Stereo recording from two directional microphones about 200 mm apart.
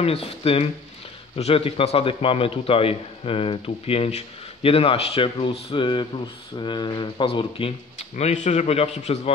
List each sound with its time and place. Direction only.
0.0 s a man's voice: 30° left (ahead or behind)